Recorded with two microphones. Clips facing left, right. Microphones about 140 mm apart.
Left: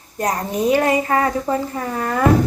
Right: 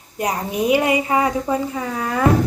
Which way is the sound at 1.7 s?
45° left (ahead or behind).